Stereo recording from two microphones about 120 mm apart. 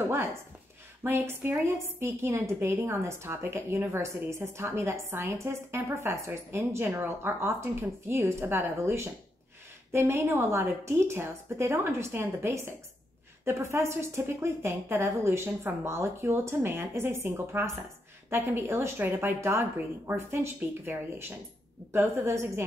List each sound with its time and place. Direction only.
0.1 s a woman's voice: 20° right (ahead or behind)